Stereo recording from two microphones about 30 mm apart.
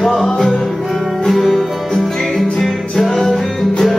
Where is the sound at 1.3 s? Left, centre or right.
Centre.